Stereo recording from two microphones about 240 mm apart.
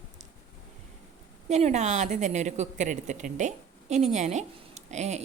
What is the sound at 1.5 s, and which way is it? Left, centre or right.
A woman's voice, right.